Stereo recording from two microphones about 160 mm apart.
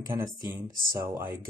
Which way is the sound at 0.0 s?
20° right (ahead or behind).